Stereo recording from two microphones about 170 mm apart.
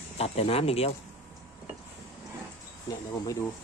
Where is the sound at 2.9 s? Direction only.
20° left (ahead or behind).